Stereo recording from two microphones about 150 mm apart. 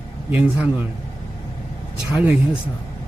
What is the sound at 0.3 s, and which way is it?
Speech, 10° right (ahead or behind).